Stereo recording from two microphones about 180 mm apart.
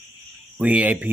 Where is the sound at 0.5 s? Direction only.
10° right (ahead or behind).